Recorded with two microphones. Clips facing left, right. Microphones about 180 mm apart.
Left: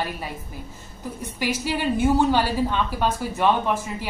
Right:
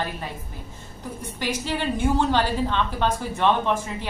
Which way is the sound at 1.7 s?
10° left (ahead or behind).